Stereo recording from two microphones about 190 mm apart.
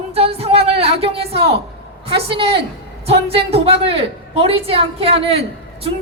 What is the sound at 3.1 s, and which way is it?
A woman's voice, 30° right (ahead or behind).